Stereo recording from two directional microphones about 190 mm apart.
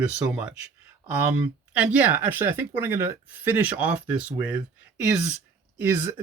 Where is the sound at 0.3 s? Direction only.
10° right (ahead or behind).